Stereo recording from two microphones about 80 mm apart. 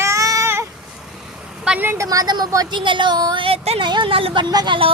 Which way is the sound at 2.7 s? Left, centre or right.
Right.